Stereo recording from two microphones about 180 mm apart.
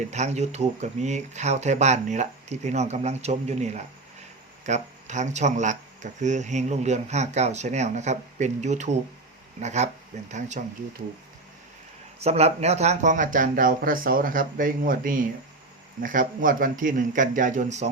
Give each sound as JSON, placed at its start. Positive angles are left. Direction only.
{"t": 0.1, "sound": "speech", "side_deg": -40}
{"t": 12.2, "sound": "speech", "side_deg": -35}